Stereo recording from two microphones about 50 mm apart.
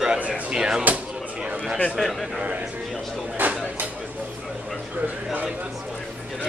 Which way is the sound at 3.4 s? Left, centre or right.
Right.